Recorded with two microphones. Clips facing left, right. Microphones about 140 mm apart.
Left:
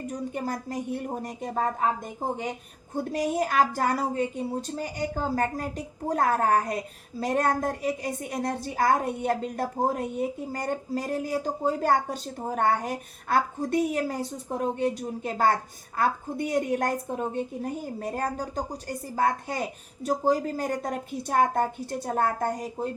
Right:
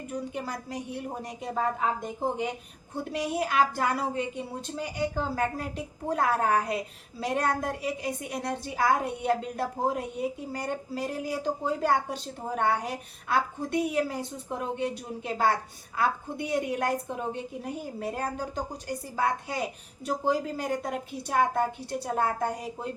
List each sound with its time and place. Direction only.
0.1 s a woman's voice: 45° left (ahead or behind)
2.9 s a woman's voice: 45° left (ahead or behind)